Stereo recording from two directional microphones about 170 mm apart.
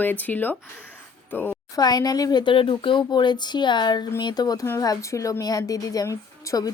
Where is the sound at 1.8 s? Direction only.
25° left (ahead or behind).